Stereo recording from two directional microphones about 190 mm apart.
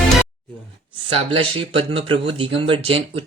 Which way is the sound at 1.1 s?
30° right (ahead or behind).